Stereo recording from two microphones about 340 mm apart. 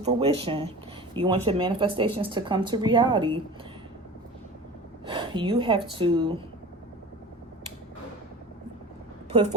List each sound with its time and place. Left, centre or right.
0.0 s speech: centre
5.0 s speech: centre
9.3 s a woman's voice: centre